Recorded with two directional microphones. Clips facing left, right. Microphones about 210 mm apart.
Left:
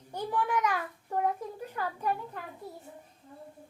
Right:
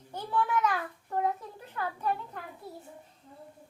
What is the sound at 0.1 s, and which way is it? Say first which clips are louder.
Speech: even; 15° left (ahead or behind).